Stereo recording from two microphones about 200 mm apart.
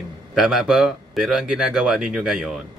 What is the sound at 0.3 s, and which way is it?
A man's voice, centre (ahead or behind).